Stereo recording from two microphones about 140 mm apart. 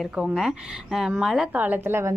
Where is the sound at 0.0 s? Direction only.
Centre (ahead or behind).